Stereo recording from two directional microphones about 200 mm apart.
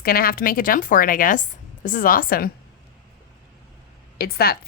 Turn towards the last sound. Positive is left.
turn(degrees=50)  # may be behind; listen again after turning